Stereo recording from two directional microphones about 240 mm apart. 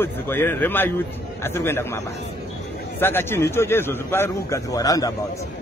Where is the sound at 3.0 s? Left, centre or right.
Centre.